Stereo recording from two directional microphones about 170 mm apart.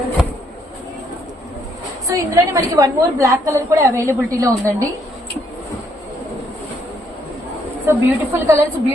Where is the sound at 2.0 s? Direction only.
20° right (ahead or behind).